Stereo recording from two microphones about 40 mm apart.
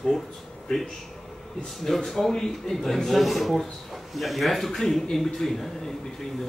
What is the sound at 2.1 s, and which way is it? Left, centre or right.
Speech, centre.